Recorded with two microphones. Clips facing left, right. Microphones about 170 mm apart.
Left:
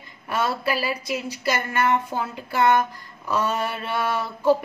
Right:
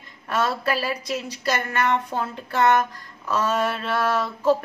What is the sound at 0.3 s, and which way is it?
A woman's voice, 10° left (ahead or behind).